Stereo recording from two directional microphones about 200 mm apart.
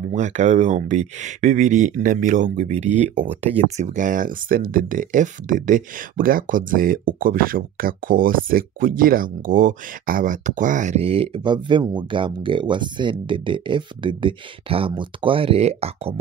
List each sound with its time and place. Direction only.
0.1 s speech: 35° right (ahead or behind)